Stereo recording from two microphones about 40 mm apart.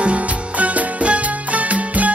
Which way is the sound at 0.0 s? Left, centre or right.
Right.